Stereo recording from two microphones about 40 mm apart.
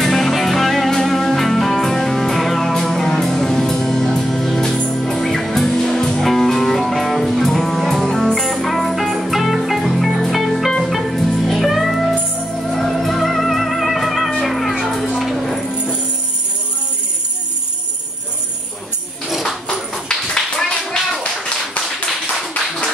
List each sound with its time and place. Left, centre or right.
0.0 s music: centre
20.1 s clapping: left
20.8 s clapping: centre